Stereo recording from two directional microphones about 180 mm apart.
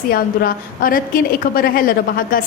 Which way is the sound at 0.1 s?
55° left (ahead or behind).